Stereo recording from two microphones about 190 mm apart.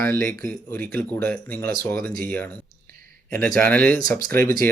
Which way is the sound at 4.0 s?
50° right (ahead or behind).